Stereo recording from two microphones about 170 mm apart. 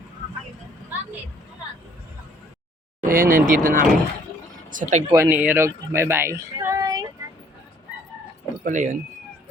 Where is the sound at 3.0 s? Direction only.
55° right (ahead or behind).